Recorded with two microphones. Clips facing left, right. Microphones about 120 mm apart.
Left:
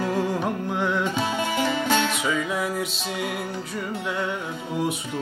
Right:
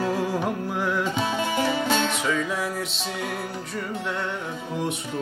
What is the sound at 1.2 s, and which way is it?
Music, 15° left (ahead or behind).